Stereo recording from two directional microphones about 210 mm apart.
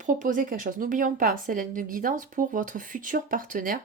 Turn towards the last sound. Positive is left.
turn(degrees=-40)  # may be behind; listen again after turning